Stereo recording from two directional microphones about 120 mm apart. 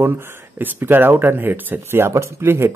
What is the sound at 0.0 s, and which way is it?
Speech, 20° right (ahead or behind).